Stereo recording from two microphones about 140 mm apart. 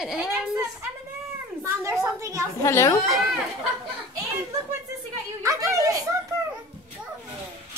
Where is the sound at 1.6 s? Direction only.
20° right (ahead or behind).